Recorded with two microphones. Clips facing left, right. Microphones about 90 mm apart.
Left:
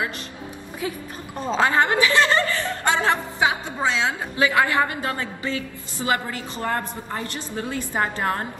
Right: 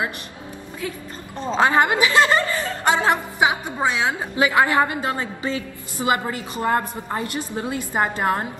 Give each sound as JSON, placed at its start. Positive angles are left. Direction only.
{"t": 1.6, "sound": "a woman's voice", "side_deg": -20}